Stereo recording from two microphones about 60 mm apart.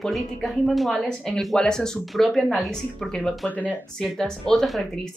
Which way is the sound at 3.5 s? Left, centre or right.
Left.